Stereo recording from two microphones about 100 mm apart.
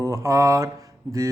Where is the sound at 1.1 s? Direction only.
45° right (ahead or behind).